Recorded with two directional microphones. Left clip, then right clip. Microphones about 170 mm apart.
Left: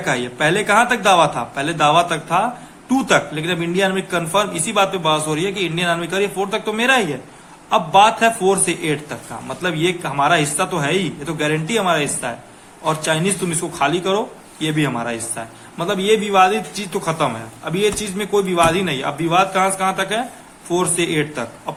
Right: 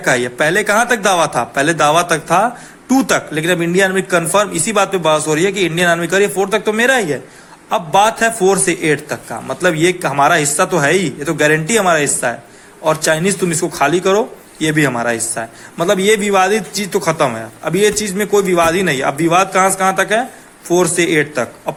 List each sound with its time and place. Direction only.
0.0 s a man's voice: 35° right (ahead or behind)